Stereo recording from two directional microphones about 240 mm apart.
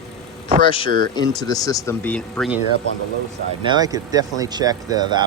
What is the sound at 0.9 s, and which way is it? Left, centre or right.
Speech, right.